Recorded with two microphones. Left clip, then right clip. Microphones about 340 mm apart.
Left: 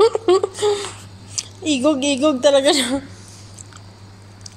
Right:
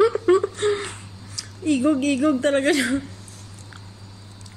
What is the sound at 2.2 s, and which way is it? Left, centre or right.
Speech, left.